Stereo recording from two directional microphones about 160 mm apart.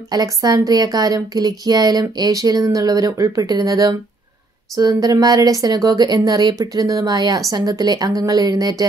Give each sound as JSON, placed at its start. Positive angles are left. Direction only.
{"t": 0.1, "sound": "a woman's voice", "side_deg": -25}